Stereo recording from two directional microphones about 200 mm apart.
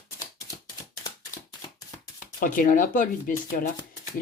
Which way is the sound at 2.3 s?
40° left (ahead or behind).